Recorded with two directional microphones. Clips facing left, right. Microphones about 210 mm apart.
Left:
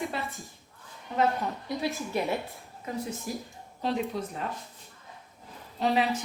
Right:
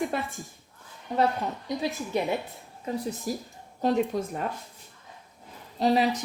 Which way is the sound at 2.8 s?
35° right (ahead or behind).